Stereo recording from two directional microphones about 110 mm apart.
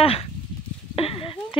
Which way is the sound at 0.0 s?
60° left (ahead or behind).